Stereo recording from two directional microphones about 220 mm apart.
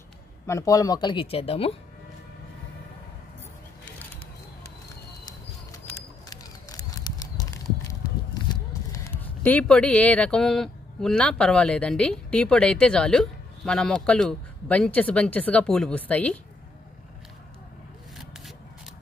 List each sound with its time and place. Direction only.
0.5 s speech: 15° left (ahead or behind)
5.7 s horse: 15° left (ahead or behind)
8.9 s speech: 10° left (ahead or behind)